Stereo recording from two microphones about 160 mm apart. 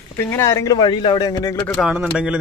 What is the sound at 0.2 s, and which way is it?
Speech, 15° left (ahead or behind).